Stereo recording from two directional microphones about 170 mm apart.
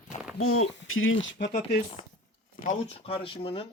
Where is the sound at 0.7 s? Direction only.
90° left.